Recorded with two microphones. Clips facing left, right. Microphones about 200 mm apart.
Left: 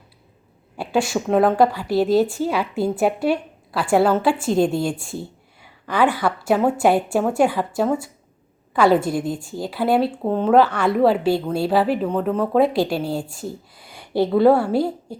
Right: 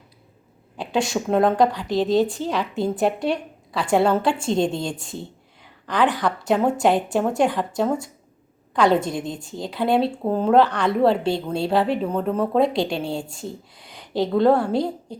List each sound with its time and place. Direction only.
0.8 s a woman's voice: 5° left (ahead or behind)
9.2 s a woman's voice: 20° right (ahead or behind)
9.6 s a woman's voice: 5° left (ahead or behind)
13.2 s a woman's voice: 25° right (ahead or behind)
13.5 s a woman's voice: 5° left (ahead or behind)